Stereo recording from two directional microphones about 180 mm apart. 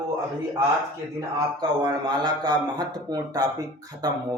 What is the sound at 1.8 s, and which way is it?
Speech, 20° right (ahead or behind).